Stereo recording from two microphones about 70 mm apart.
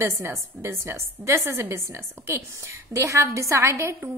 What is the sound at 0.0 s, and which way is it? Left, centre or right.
A woman's voice, right.